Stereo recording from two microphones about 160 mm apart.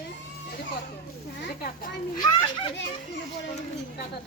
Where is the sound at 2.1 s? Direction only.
30° left (ahead or behind).